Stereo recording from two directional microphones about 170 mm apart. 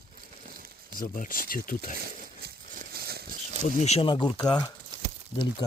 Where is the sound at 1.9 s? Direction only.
65° right (ahead or behind).